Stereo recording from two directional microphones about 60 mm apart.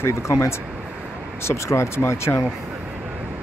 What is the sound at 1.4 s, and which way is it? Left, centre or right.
Speech, left.